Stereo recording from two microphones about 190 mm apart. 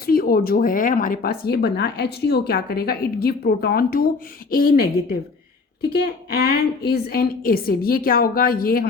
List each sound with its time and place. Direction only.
0.0 s speech: 50° left (ahead or behind)